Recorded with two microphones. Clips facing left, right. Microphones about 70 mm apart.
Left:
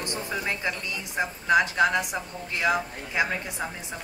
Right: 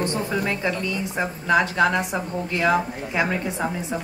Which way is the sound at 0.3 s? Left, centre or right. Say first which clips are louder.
Right 5 dB; centre.